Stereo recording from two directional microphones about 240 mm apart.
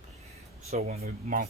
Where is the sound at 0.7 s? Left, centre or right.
Right.